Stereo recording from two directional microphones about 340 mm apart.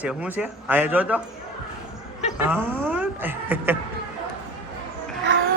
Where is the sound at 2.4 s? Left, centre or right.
Centre.